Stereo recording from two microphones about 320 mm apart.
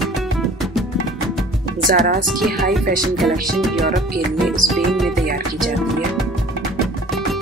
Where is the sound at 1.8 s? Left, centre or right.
Right.